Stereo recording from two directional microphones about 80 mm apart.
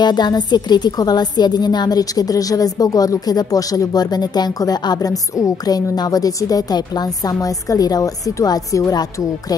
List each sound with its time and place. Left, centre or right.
0.0 s a woman's voice: left